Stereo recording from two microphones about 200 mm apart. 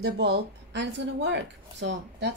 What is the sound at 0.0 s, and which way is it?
Speech, 60° right (ahead or behind).